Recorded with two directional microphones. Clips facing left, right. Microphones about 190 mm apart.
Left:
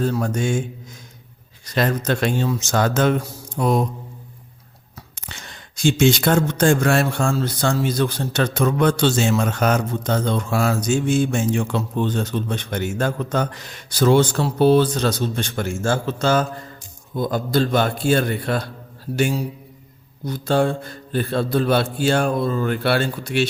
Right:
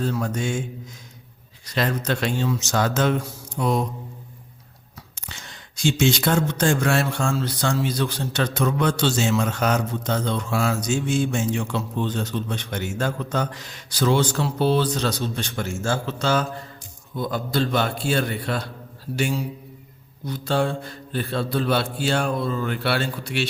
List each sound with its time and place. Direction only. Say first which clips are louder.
0.0 s speech: left 4 dB; 45° left (ahead or behind)
1.6 s speech: left 3 dB; 45° left (ahead or behind)
5.1 s speech: left 2 dB; 55° left (ahead or behind)